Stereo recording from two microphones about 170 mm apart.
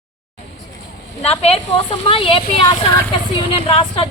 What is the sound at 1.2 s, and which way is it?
A woman's voice, 40° left (ahead or behind).